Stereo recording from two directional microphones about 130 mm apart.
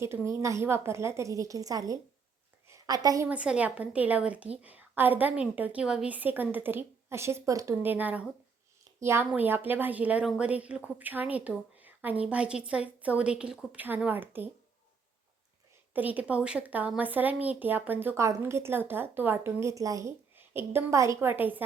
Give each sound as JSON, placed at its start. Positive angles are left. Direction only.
{"t": 0.0, "sound": "a woman's voice", "side_deg": -20}
{"t": 2.6, "sound": "a sound", "side_deg": -25}
{"t": 3.2, "sound": "a woman's voice", "side_deg": -10}
{"t": 15.9, "sound": "a woman's voice", "side_deg": -15}